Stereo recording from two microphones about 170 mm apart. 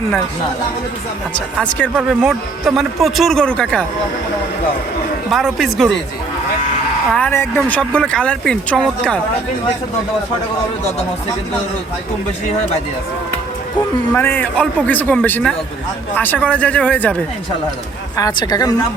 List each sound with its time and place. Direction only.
1.3 s a man's voice: 5° left (ahead or behind)
2.0 s speech: 5° right (ahead or behind)
5.3 s speech: centre (ahead or behind)
7.1 s speech: 10° left (ahead or behind)
14.1 s a man's voice: 10° left (ahead or behind)
18.2 s a woman's voice: 25° left (ahead or behind)